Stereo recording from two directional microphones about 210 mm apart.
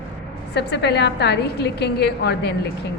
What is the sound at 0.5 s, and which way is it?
A woman's voice, 55° left (ahead or behind).